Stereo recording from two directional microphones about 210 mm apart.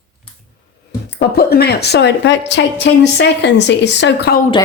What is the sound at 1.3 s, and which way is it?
A woman's voice, 50° left (ahead or behind).